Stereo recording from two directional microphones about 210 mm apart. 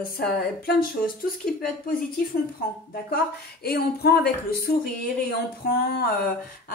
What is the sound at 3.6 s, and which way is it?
Speech, 50° left (ahead or behind).